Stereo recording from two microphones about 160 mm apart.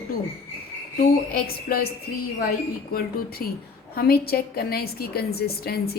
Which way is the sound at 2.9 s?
70° left (ahead or behind).